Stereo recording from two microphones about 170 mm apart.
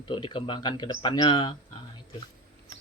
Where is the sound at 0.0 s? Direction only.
30° left (ahead or behind).